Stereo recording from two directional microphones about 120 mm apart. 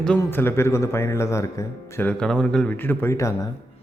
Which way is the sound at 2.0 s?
5° left (ahead or behind).